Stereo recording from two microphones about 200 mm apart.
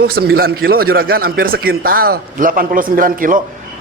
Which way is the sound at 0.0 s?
50° right (ahead or behind).